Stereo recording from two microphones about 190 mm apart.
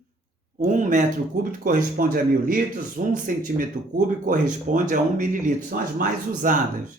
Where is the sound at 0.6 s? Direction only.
40° right (ahead or behind).